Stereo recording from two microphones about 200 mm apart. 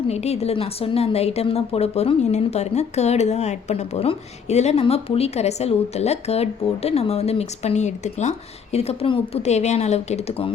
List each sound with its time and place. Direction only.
0.1 s a woman's voice: 30° left (ahead or behind)